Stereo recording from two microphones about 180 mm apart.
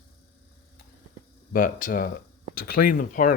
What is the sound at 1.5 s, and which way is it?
Speech, 50° left (ahead or behind).